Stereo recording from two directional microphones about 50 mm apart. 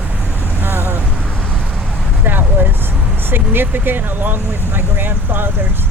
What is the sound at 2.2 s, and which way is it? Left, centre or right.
Speech, right.